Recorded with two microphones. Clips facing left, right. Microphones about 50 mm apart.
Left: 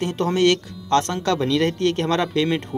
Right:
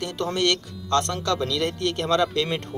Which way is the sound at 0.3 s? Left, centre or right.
Left.